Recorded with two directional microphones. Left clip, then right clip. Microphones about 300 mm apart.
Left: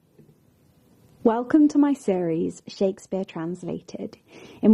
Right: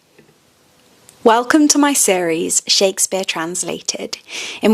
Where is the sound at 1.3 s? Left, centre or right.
Centre.